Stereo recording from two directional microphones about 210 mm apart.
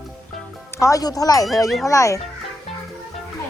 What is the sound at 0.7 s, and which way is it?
Speech, 15° left (ahead or behind).